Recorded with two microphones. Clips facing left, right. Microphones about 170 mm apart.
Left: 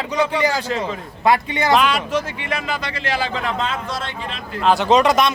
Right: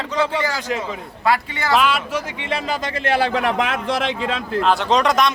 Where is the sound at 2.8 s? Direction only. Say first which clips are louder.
Right 4 dB; 50° right (ahead or behind); by 4.4 s 90° right.